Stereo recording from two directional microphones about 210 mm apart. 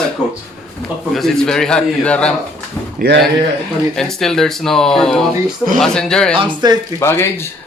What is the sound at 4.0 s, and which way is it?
A man's voice, centre (ahead or behind).